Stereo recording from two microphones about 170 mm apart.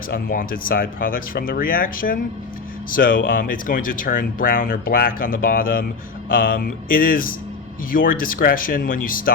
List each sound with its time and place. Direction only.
0.1 s speech: 55° left (ahead or behind)